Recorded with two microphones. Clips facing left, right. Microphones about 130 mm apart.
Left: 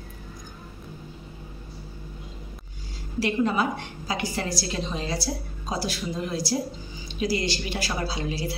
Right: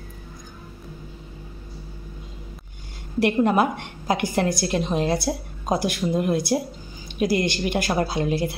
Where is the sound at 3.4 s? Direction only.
55° right (ahead or behind).